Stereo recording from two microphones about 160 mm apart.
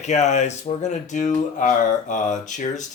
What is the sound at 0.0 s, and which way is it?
Speech, 45° left (ahead or behind).